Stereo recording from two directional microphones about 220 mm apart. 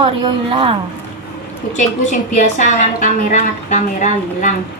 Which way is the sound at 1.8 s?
35° left (ahead or behind).